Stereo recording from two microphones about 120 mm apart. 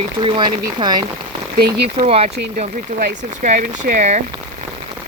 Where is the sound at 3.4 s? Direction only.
80° right.